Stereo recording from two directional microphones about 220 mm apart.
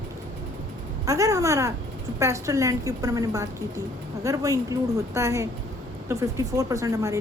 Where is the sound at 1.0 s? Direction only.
15° right (ahead or behind).